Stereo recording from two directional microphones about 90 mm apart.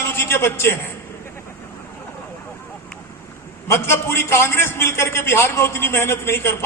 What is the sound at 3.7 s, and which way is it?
A man's voice, 30° left (ahead or behind).